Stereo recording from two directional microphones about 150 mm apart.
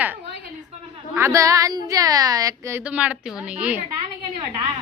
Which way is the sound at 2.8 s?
10° right (ahead or behind).